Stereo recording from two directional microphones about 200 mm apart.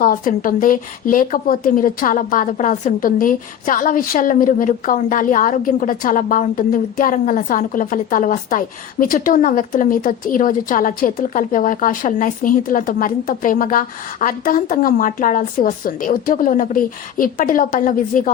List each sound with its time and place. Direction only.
0.0 s a woman's voice: 45° left (ahead or behind)